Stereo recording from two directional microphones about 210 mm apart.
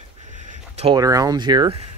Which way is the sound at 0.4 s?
35° right (ahead or behind).